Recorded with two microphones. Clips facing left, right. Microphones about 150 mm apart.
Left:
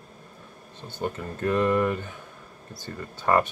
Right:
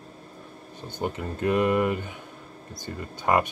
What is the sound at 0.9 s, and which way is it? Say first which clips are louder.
Speech: right 1 dB; 15° right (ahead or behind).